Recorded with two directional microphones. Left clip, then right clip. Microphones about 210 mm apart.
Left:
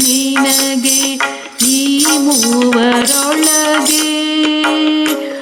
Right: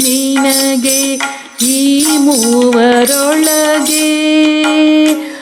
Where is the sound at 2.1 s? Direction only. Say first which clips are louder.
Right 2 dB; 20° left (ahead or behind).